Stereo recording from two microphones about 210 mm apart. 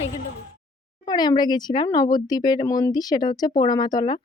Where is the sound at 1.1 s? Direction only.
20° left (ahead or behind).